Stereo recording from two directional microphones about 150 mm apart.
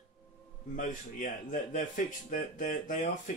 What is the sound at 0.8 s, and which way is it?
A man's voice, 60° left (ahead or behind).